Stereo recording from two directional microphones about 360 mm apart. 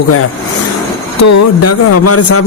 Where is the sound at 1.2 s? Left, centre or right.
Left.